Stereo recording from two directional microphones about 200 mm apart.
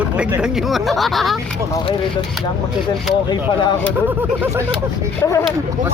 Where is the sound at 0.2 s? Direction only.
5° right (ahead or behind).